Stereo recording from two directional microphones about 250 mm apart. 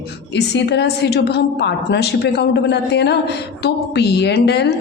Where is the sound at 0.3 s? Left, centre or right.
Left.